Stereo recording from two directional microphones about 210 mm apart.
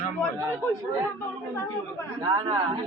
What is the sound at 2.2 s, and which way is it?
Speech, 20° right (ahead or behind).